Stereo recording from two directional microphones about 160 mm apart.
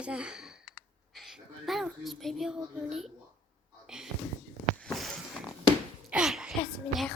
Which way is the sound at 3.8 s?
5° right (ahead or behind).